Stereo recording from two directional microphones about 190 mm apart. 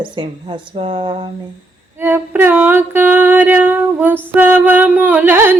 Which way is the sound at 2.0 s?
10° right (ahead or behind).